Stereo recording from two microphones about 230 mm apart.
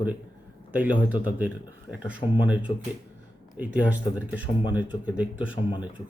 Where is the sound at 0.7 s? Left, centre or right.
Centre.